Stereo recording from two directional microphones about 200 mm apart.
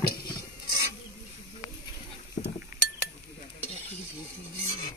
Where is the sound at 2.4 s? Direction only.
55° left (ahead or behind).